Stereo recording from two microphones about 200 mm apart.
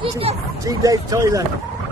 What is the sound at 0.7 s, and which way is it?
Speech, 20° right (ahead or behind).